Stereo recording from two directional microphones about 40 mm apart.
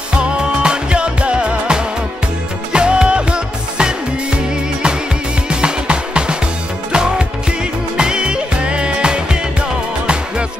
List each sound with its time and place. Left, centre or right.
0.2 s music: right
5.5 s music: right